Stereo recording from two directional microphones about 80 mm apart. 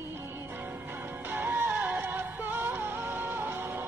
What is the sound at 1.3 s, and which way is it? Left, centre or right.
Music, right.